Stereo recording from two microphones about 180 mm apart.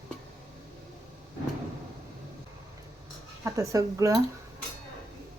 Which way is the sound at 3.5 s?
20° right (ahead or behind).